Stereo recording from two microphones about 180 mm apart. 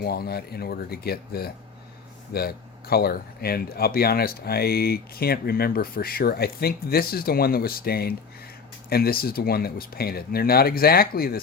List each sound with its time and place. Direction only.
0.0 s speech: 60° left (ahead or behind)